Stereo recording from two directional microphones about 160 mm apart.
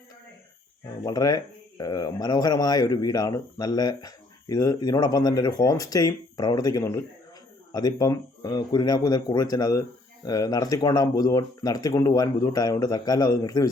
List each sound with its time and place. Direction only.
1.0 s speech: 25° left (ahead or behind)